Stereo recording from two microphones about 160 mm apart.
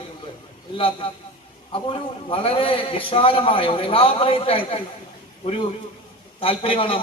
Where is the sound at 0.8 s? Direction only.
35° left (ahead or behind).